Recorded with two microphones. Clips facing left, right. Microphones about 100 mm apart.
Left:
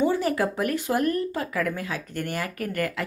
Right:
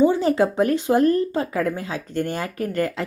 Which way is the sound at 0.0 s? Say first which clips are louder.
Right 6 dB; 25° right (ahead or behind).